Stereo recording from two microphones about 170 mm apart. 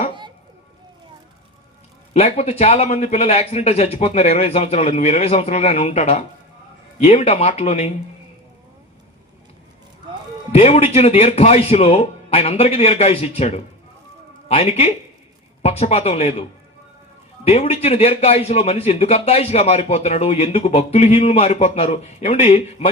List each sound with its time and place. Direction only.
2.1 s a man's voice: 35° left (ahead or behind)
10.5 s a man's voice: 40° left (ahead or behind)